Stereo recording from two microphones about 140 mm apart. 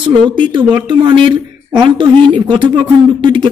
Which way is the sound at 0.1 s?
35° right (ahead or behind).